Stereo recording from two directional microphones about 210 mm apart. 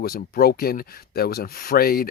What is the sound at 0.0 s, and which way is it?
Speech, 45° left (ahead or behind).